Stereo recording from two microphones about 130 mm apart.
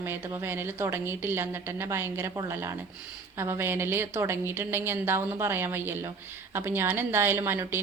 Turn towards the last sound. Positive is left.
turn(degrees=-20)  # may be behind; listen again after turning